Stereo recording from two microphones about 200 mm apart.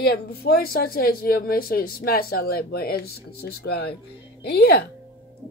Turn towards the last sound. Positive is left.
turn(degrees=50)  # may be behind; listen again after turning